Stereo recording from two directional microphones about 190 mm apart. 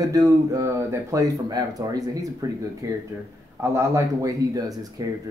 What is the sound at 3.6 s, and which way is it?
Speech, 15° right (ahead or behind).